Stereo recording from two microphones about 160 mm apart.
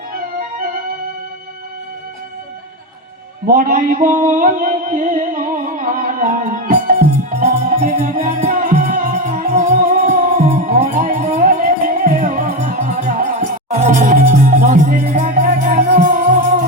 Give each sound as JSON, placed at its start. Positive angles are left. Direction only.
{"t": 3.4, "sound": "music", "side_deg": -60}
{"t": 7.8, "sound": "music", "side_deg": -40}
{"t": 8.1, "sound": "music", "side_deg": -60}
{"t": 10.8, "sound": "music", "side_deg": -60}